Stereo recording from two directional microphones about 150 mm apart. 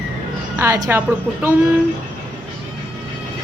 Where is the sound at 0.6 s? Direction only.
15° right (ahead or behind).